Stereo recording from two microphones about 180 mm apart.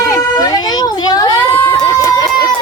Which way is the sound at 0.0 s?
20° left (ahead or behind).